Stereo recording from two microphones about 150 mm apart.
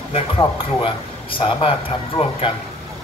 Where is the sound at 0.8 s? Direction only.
35° left (ahead or behind).